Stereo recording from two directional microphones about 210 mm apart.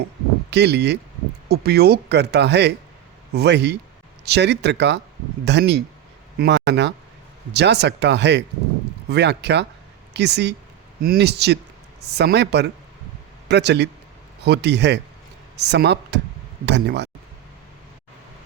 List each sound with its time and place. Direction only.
0.5 s speech: 55° right (ahead or behind)